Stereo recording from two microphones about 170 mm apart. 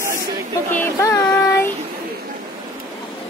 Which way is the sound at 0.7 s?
15° left (ahead or behind).